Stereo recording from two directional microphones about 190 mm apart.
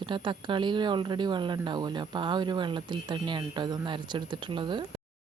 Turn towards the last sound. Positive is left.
turn(degrees=-25)  # may be behind; listen again after turning